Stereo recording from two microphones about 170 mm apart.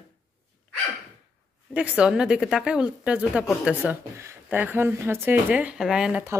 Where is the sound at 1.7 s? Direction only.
5° right (ahead or behind).